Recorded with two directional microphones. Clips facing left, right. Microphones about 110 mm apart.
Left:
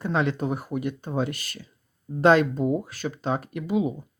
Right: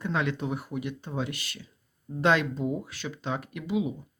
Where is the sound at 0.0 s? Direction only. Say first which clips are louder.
Left 4 dB; 35° left (ahead or behind).